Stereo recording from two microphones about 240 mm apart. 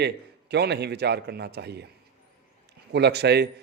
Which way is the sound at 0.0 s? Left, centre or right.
Right.